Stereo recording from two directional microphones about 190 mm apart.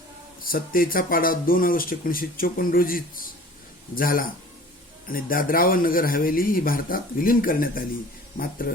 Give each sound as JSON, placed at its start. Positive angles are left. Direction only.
{"t": 0.4, "sound": "speech", "side_deg": 50}